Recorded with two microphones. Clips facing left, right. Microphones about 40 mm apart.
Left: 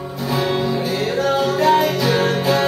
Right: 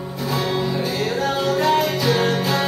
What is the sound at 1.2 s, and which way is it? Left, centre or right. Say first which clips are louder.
Music: left 4 dB; centre.